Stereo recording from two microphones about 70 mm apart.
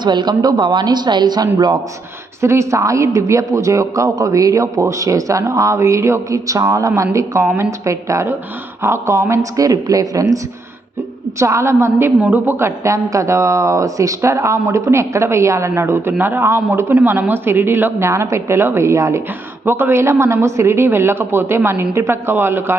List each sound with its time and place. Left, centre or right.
0.0 s a woman's voice: right
2.4 s a man's voice: right
11.3 s a man's voice: right
18.1 s a man's voice: right
19.6 s speech: right